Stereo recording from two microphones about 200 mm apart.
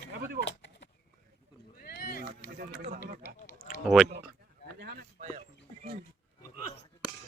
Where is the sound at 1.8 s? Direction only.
50° left (ahead or behind).